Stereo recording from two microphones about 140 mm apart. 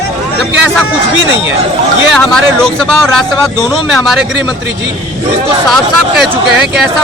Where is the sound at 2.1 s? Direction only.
5° left (ahead or behind).